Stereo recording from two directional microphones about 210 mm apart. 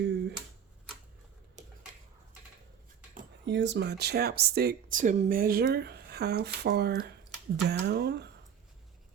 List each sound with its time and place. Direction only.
0.0 s typewriter: 55° right (ahead or behind)
3.4 s speech: 55° right (ahead or behind)